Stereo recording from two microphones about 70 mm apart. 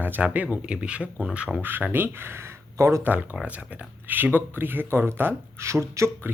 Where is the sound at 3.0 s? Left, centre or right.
Right.